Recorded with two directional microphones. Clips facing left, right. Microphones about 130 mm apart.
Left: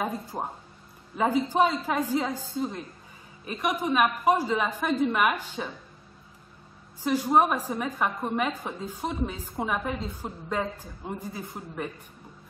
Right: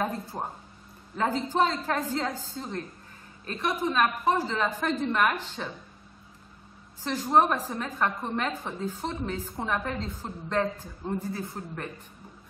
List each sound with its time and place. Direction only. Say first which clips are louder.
0.0 s a woman's voice: even; 10° left (ahead or behind)
7.0 s a woman's voice: left 1 dB; 10° left (ahead or behind)